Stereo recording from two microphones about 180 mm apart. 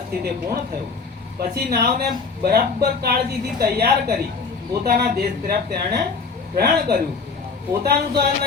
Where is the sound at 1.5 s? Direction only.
60° right (ahead or behind).